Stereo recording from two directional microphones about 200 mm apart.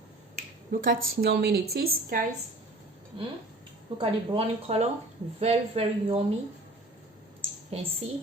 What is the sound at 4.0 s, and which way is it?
A woman's voice, 30° right (ahead or behind).